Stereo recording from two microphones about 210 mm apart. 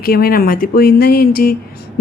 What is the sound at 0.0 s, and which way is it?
Speech, 45° left (ahead or behind).